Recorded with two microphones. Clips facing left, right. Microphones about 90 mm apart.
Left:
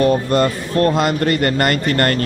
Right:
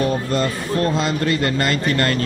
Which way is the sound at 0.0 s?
55° left (ahead or behind).